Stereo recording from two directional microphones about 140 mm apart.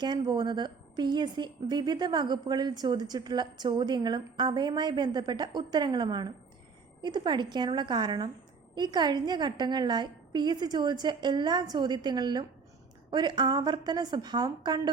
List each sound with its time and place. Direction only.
0.0 s a woman's voice: 30° right (ahead or behind)